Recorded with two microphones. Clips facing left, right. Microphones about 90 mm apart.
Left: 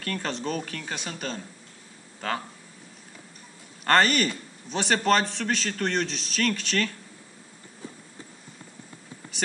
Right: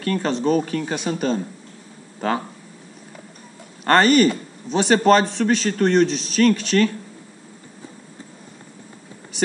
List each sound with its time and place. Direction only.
0.0 s a man's voice: 10° right (ahead or behind)
3.8 s a man's voice: 5° right (ahead or behind)